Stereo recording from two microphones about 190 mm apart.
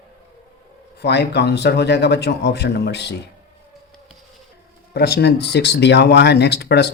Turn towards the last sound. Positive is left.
turn(degrees=60)  # may be behind; listen again after turning